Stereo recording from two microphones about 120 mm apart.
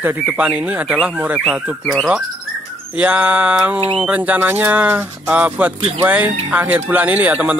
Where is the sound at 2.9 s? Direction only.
10° right (ahead or behind).